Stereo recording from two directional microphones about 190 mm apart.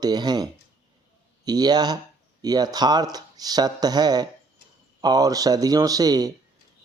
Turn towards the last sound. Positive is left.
turn(degrees=-20)  # may be behind; listen again after turning